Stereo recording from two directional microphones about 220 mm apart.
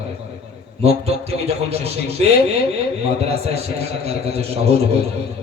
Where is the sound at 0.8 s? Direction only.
30° right (ahead or behind).